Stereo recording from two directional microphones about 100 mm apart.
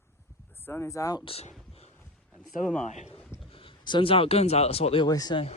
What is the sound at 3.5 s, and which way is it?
Speech, 65° left (ahead or behind).